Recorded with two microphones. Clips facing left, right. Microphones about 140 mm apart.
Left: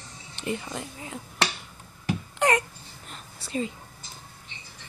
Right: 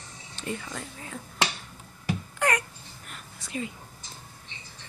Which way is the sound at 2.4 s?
25° left (ahead or behind).